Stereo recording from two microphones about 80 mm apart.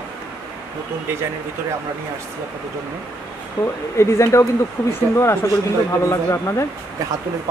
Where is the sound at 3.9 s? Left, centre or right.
Left.